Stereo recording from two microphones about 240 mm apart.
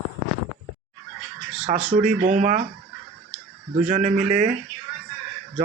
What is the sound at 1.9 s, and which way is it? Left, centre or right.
Speech, right.